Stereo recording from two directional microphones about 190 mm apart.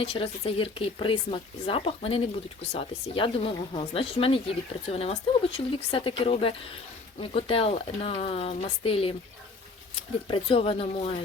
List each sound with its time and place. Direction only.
0.0 s speech: 30° left (ahead or behind)